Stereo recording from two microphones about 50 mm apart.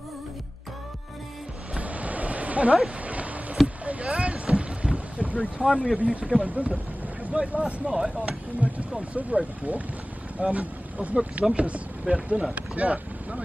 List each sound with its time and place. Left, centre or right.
1.8 s a sound: right
3.6 s boat: right
5.6 s speech: centre
8.2 s speech: right